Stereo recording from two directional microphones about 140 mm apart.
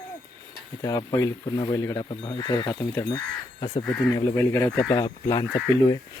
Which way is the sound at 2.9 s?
20° left (ahead or behind).